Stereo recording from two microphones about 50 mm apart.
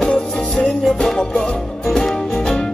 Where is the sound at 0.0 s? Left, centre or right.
Left.